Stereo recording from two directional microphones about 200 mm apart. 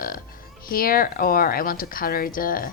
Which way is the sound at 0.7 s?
45° left (ahead or behind).